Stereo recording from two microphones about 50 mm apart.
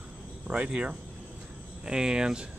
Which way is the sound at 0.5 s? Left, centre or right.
Right.